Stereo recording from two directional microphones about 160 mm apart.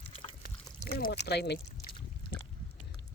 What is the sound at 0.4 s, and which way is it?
Pour, 65° left (ahead or behind).